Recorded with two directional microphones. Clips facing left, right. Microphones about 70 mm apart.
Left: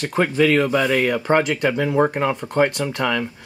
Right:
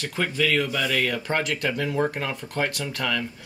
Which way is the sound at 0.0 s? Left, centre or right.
Left.